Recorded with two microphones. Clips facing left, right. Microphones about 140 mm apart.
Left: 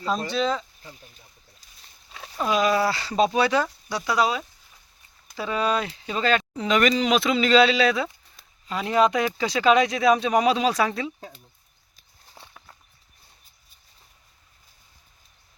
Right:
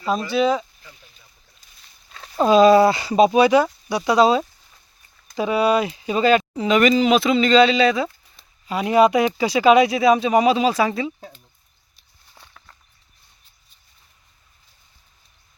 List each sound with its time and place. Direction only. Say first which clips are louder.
0.3 s speech: right 8 dB; 10° right (ahead or behind)
0.8 s a sound: left 3 dB; 40° left (ahead or behind)
2.3 s speech: right 10 dB; 30° right (ahead or behind)
5.4 s speech: right 6 dB; 10° right (ahead or behind)
12.4 s walk: left 1 dB; 15° left (ahead or behind)